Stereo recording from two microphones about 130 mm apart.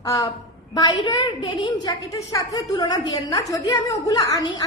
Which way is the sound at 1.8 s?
30° left (ahead or behind).